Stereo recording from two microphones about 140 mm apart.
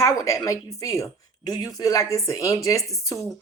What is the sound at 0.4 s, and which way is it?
Speech, 25° left (ahead or behind).